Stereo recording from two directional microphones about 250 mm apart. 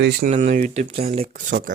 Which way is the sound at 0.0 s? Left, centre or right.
Right.